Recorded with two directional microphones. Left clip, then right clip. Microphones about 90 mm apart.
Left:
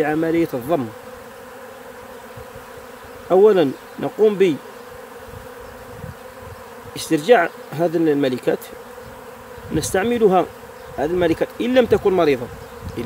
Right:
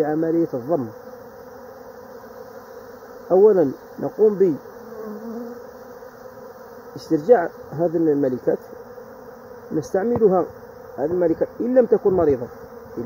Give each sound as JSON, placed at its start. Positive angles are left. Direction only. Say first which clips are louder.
{"t": 0.0, "sound": "speech", "louder": "left 2 dB", "side_deg": 75}
{"t": 0.4, "sound": "speech", "louder": "left 2 dB", "side_deg": 55}
{"t": 3.3, "sound": "bee", "louder": "left 1 dB", "side_deg": 60}
{"t": 7.0, "sound": "speech", "louder": "left 1 dB", "side_deg": 50}
{"t": 7.7, "sound": "bee", "louder": "left 1 dB", "side_deg": 60}
{"t": 9.9, "sound": "speech", "louder": "left 2 dB", "side_deg": 80}